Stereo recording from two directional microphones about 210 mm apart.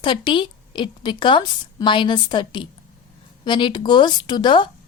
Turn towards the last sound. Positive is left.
turn(degrees=20)  # may be behind; listen again after turning